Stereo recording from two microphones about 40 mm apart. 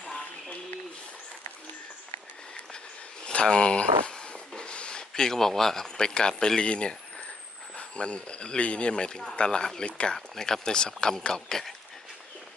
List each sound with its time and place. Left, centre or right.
3.4 s speech: centre
10.2 s speech: centre